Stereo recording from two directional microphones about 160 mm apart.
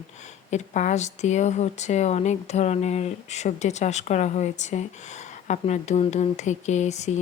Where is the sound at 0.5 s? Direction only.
50° left (ahead or behind).